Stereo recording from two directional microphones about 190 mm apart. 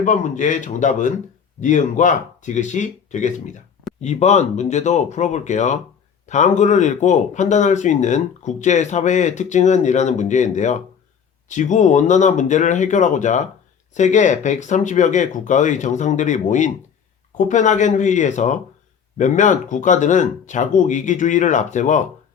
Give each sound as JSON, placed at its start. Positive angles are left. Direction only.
{"t": 0.0, "sound": "speech", "side_deg": 40}